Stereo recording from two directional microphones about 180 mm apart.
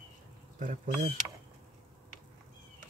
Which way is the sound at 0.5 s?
45° right (ahead or behind).